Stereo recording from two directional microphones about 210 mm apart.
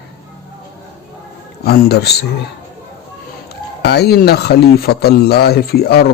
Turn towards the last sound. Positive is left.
turn(degrees=50)  # may be behind; listen again after turning